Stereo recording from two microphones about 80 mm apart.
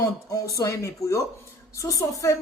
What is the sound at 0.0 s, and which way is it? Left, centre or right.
A woman's voice, left.